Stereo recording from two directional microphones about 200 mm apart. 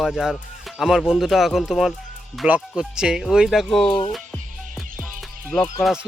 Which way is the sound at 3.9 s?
25° left (ahead or behind).